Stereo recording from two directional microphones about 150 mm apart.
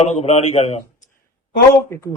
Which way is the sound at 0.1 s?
45° left (ahead or behind).